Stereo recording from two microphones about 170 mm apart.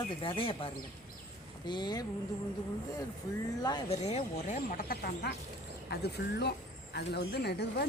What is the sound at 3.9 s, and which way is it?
Speech, 35° left (ahead or behind).